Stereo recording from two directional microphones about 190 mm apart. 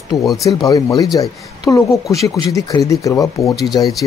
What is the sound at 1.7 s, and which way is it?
Speech, 15° left (ahead or behind).